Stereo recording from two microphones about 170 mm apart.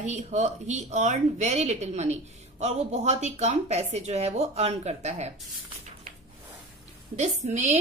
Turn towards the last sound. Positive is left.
turn(degrees=-45)  # may be behind; listen again after turning